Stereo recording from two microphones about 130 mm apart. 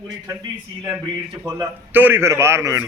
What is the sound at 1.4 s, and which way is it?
Speech, 25° right (ahead or behind).